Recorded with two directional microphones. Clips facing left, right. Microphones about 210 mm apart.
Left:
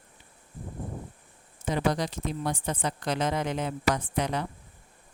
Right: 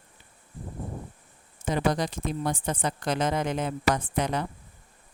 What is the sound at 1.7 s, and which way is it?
Speech, 50° right (ahead or behind).